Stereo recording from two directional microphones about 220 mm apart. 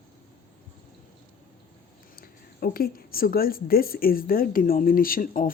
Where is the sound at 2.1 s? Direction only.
40° left (ahead or behind).